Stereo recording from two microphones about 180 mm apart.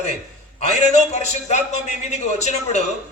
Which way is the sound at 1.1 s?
40° left (ahead or behind).